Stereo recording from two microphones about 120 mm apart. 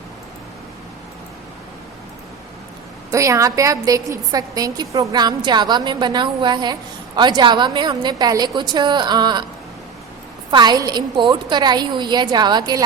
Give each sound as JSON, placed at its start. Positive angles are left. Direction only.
{"t": 3.1, "sound": "a woman's voice", "side_deg": -25}
{"t": 10.5, "sound": "a woman's voice", "side_deg": -35}